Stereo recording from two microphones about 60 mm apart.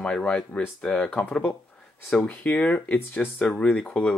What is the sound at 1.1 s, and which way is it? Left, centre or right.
Speech, left.